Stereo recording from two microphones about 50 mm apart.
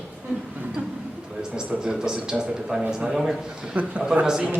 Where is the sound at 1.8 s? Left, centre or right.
Centre.